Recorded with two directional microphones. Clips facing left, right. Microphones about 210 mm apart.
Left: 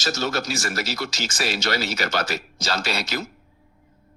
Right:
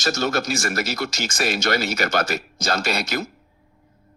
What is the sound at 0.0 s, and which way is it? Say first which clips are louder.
Speech: right 3 dB; 50° right (ahead or behind).